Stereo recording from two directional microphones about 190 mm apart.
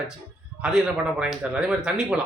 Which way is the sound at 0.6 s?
5° right (ahead or behind).